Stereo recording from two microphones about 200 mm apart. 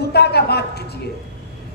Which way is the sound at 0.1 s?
55° left (ahead or behind).